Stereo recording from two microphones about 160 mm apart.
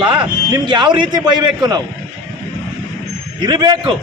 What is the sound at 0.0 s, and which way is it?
A man's voice, 30° right (ahead or behind).